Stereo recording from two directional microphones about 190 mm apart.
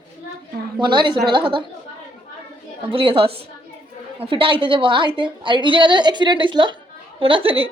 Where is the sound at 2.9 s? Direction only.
30° right (ahead or behind).